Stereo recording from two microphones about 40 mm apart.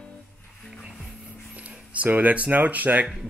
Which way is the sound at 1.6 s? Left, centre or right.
Right.